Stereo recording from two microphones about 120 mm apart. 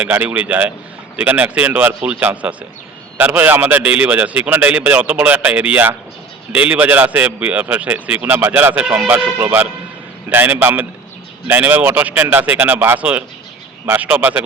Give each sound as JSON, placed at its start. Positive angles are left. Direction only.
{"t": 0.0, "sound": "speech", "side_deg": -15}